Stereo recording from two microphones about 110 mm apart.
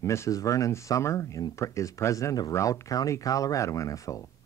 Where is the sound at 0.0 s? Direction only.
25° left (ahead or behind).